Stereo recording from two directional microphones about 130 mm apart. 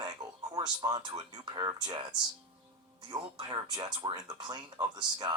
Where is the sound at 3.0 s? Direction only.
35° right (ahead or behind).